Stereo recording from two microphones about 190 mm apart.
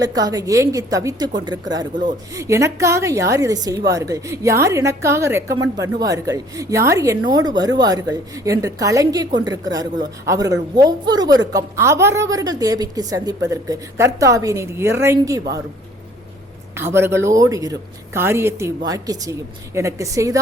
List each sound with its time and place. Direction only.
0.0 s a woman's voice: 20° right (ahead or behind)
16.7 s a woman's voice: 10° right (ahead or behind)